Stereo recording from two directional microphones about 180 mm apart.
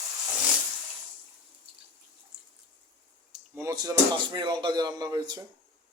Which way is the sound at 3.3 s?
15° right (ahead or behind).